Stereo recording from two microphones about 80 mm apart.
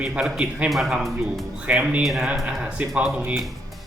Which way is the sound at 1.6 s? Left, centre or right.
Centre.